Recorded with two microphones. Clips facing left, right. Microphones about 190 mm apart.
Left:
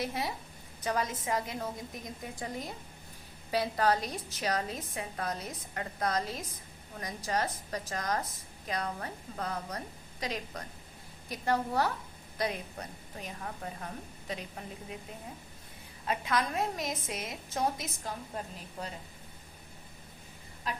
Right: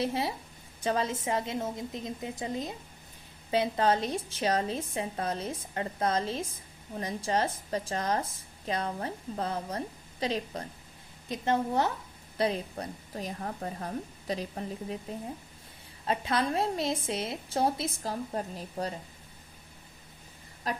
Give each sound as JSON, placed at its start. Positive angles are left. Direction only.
{"t": 0.0, "sound": "a woman's voice", "side_deg": -30}
{"t": 16.0, "sound": "a woman's voice", "side_deg": -30}